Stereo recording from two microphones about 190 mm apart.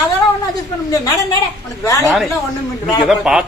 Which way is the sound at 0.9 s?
20° left (ahead or behind).